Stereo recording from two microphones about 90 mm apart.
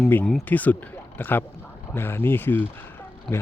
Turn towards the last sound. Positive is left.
turn(degrees=10)  # may be behind; listen again after turning